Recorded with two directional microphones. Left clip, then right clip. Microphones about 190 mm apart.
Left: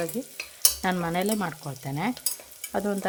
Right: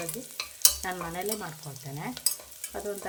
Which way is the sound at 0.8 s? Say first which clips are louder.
Left 7 dB; 50° left (ahead or behind).